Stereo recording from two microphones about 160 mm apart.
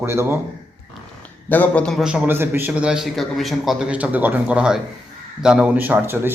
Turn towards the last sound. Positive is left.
turn(degrees=-15)  # may be behind; listen again after turning